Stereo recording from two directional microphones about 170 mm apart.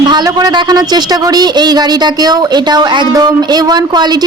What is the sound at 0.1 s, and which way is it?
Speech, 25° right (ahead or behind).